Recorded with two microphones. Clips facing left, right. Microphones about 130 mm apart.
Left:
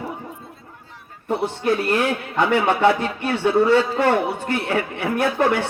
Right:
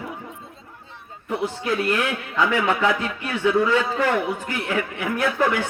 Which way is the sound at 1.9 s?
35° left (ahead or behind).